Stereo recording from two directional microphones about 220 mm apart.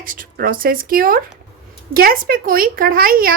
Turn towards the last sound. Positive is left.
turn(degrees=-40)  # may be behind; listen again after turning